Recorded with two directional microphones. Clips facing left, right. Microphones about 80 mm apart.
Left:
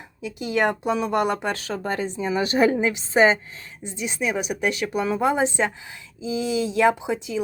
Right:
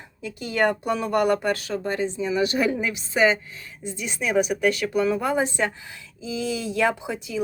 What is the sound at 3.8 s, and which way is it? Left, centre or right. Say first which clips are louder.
Speech: left 1 dB; left.